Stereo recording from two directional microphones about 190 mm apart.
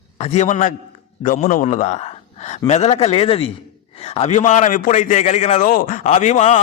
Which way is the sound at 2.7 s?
35° left (ahead or behind).